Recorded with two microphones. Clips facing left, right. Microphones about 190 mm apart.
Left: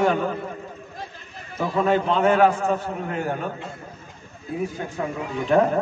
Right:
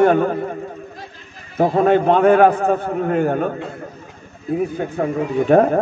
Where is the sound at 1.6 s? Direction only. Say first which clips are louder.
Right 7 dB; 55° right (ahead or behind).